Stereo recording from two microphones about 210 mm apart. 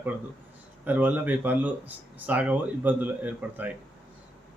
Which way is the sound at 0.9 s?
10° right (ahead or behind).